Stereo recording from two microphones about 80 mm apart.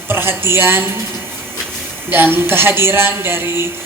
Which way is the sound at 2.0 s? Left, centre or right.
Right.